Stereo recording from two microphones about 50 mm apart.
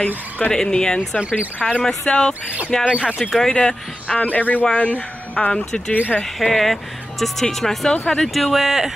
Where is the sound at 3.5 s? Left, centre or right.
Centre.